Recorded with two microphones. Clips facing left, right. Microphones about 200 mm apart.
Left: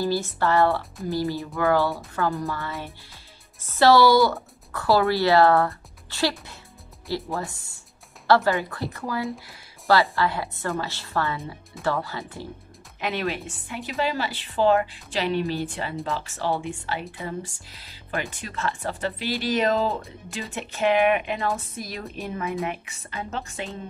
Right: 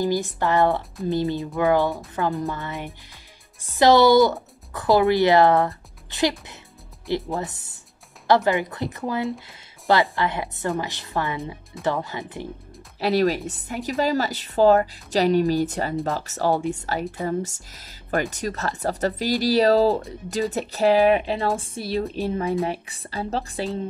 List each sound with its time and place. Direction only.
0.0 s speech: 15° right (ahead or behind)
9.5 s a sound: 15° right (ahead or behind)
10.1 s speech: 20° right (ahead or behind)
13.0 s speech: 35° right (ahead or behind)